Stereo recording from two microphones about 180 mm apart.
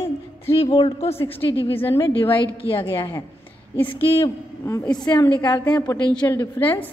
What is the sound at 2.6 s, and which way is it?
Speech, 15° right (ahead or behind).